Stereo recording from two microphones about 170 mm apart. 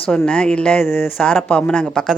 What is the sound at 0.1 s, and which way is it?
A woman's voice, 5° left (ahead or behind).